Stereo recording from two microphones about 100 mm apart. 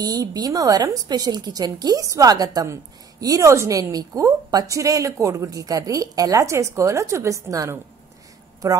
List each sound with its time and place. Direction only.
0.0 s speech: 40° right (ahead or behind)